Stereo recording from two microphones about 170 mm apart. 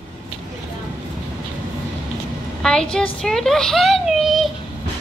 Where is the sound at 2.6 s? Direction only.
5° left (ahead or behind).